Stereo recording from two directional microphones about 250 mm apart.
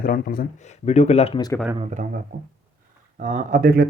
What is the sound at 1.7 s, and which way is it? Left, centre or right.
Speech, right.